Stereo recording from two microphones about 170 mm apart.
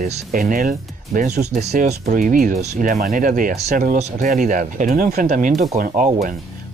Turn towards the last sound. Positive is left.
turn(degrees=-50)  # may be behind; listen again after turning